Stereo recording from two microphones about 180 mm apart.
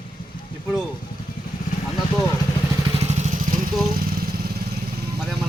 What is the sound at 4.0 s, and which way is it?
Motorcycle, 55° right (ahead or behind).